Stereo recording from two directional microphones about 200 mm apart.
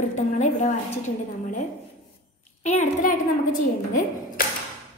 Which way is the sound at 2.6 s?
35° left (ahead or behind).